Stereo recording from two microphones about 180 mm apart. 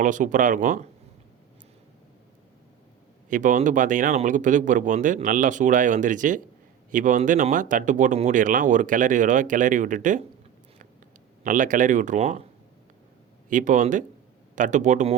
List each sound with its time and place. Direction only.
0.0 s speech: 45° right (ahead or behind)
3.2 s speech: 45° right (ahead or behind)
11.4 s speech: 45° right (ahead or behind)
13.5 s speech: 45° right (ahead or behind)